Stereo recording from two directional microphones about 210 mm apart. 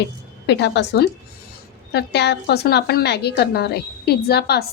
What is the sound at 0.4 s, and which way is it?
A woman's voice, 55° left (ahead or behind).